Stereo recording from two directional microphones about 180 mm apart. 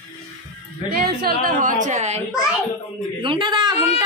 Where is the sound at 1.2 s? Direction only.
45° right (ahead or behind).